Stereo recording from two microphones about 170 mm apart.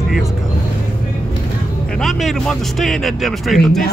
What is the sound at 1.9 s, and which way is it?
Speech, centre (ahead or behind).